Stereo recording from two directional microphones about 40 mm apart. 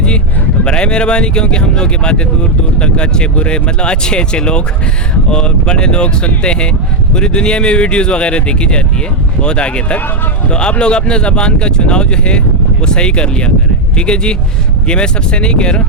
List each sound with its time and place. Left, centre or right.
0.6 s speech: left